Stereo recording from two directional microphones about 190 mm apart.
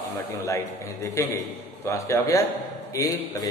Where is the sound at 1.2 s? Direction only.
15° left (ahead or behind).